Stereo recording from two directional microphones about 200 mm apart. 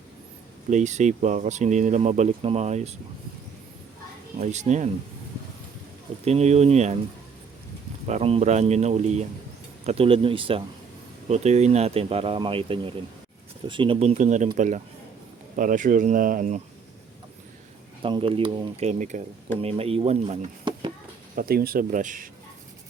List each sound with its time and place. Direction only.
0.7 s speech: 35° right (ahead or behind)
4.4 s speech: 35° right (ahead or behind)
6.2 s speech: 30° right (ahead or behind)
8.0 s speech: 30° right (ahead or behind)
18.0 s speech: 25° right (ahead or behind)
21.3 s speech: 45° right (ahead or behind)